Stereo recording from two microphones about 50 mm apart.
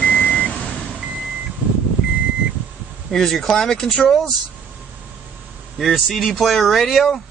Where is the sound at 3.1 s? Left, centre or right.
Centre.